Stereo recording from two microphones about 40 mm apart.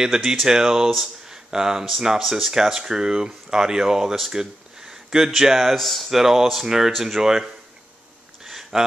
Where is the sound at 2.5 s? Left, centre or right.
Centre.